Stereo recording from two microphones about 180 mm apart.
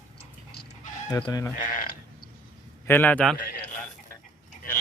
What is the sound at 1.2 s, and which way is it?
Speech, 20° left (ahead or behind).